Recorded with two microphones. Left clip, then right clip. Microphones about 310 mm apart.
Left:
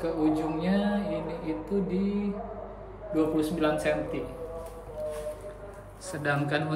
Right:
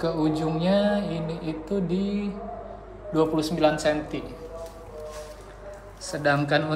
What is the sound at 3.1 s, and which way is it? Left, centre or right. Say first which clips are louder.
Speech: right 3 dB; centre.